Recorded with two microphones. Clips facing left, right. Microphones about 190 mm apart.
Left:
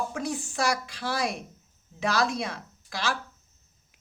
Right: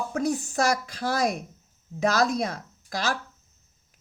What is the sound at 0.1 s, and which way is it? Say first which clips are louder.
A man's voice: right 5 dB; 45° right (ahead or behind).